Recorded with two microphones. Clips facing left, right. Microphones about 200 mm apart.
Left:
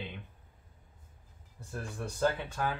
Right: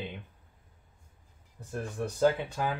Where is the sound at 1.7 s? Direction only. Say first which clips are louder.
Right 5 dB; 15° right (ahead or behind).